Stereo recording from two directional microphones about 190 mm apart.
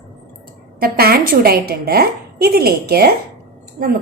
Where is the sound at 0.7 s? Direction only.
50° right (ahead or behind).